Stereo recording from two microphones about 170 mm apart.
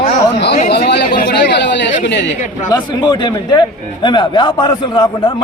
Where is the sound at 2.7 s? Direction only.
25° left (ahead or behind).